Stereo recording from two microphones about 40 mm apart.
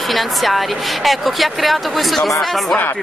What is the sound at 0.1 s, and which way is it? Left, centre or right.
Speech, centre.